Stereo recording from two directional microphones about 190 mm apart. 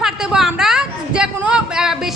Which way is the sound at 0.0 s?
5° right (ahead or behind).